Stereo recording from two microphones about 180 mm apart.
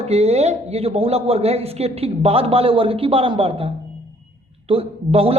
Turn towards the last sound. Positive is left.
turn(degrees=-35)  # may be behind; listen again after turning